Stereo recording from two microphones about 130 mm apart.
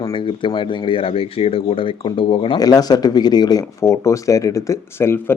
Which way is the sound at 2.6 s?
30° left (ahead or behind).